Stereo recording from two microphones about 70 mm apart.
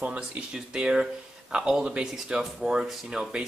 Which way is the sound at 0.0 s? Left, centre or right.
Right.